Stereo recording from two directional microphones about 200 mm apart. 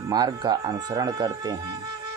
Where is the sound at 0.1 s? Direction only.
20° right (ahead or behind).